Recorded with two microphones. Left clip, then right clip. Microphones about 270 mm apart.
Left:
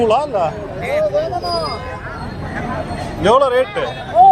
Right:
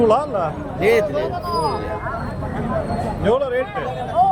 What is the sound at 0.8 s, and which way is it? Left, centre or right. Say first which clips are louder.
Speech: right 3 dB; right.